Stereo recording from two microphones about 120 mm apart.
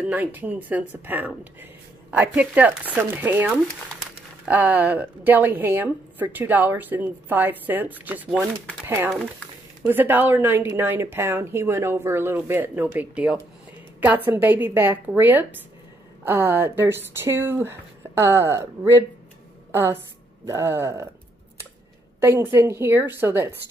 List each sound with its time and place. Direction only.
0.0 s a woman's voice: 15° right (ahead or behind)
22.2 s speech: 20° right (ahead or behind)